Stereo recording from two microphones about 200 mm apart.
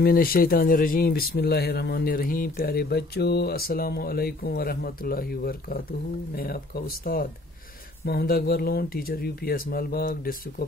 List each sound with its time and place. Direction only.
0.0 s speech: 45° left (ahead or behind)